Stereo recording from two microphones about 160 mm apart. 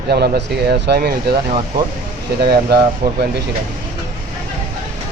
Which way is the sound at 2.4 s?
85° right.